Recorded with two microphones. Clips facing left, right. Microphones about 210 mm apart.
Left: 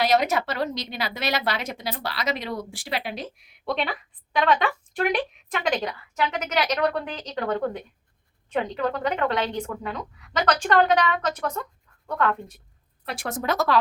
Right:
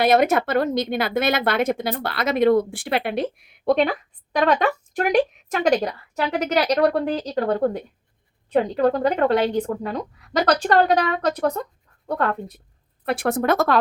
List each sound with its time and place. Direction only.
0.0 s a woman's voice: 55° right (ahead or behind); by 12.4 s 35° right (ahead or behind)
13.1 s speech: 55° right (ahead or behind)